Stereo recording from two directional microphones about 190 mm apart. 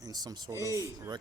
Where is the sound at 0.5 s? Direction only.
15° left (ahead or behind).